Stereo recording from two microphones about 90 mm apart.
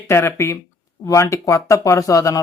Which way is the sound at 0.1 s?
25° left (ahead or behind).